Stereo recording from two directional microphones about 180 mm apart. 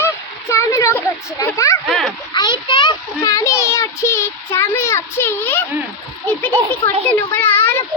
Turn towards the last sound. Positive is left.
turn(degrees=10)  # may be behind; listen again after turning